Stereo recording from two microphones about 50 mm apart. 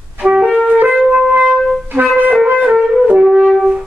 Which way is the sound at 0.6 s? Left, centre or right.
Right.